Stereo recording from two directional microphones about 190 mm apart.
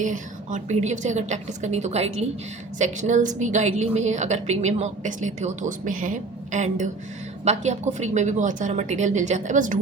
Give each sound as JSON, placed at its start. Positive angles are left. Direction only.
{"t": 0.0, "sound": "a woman's voice", "side_deg": -40}